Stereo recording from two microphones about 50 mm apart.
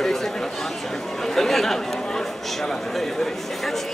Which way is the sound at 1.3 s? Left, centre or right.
Centre.